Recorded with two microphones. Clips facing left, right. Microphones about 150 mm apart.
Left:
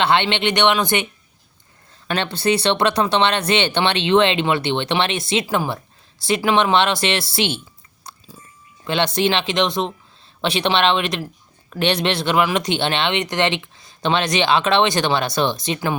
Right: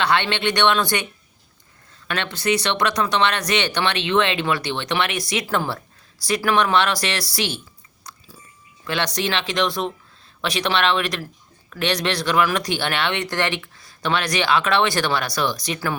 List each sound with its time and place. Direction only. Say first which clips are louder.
0.0 s speech: left 3 dB; 25° left (ahead or behind)
2.0 s speech: left 3 dB; 30° left (ahead or behind)
8.1 s biting: left 2 dB; 30° left (ahead or behind)
8.8 s speech: left 5 dB; 25° left (ahead or behind)